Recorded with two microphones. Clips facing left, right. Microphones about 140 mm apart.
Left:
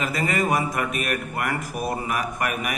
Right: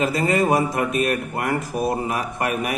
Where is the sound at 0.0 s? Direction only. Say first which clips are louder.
Right 5 dB; 30° right (ahead or behind).